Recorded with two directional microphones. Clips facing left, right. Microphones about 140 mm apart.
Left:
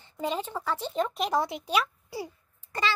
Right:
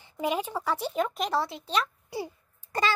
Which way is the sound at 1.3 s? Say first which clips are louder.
Left 2 dB; 20° left (ahead or behind).